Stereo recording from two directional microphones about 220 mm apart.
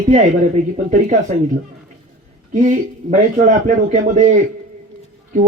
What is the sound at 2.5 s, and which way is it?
A man's voice, 35° right (ahead or behind).